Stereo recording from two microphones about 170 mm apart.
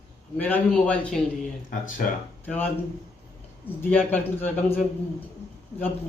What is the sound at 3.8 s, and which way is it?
Speech, 10° left (ahead or behind).